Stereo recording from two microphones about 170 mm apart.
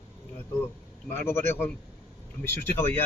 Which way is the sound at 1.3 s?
15° left (ahead or behind).